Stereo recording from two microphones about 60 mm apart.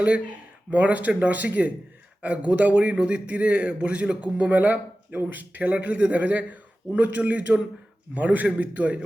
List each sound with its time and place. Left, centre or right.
0.0 s a man's voice: right